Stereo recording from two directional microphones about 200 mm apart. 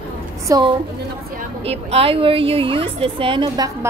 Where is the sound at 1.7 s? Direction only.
30° right (ahead or behind).